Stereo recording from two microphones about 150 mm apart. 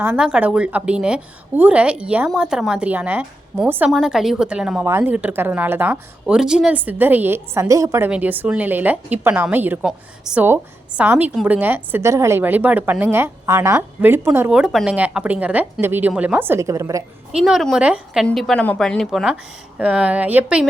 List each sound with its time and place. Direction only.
0.0 s a woman's voice: 10° right (ahead or behind)
14.5 s a woman's voice: centre (ahead or behind); by 17.0 s 20° right (ahead or behind)
17.3 s a woman's voice: centre (ahead or behind)